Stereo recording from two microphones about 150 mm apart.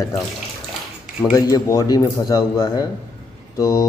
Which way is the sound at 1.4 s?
25° left (ahead or behind).